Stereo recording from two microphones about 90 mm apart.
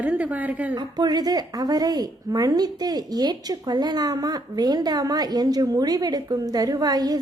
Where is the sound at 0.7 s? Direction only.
50° right (ahead or behind).